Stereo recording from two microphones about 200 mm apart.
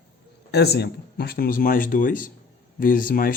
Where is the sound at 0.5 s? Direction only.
55° left (ahead or behind).